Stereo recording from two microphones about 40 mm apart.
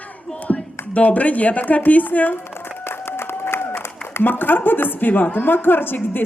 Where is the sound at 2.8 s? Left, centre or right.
Left.